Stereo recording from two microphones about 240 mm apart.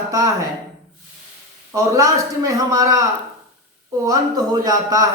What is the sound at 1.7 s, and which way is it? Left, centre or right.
A man's voice, centre.